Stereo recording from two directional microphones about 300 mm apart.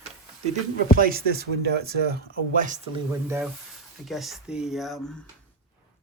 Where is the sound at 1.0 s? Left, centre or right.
Right; by 5.1 s centre.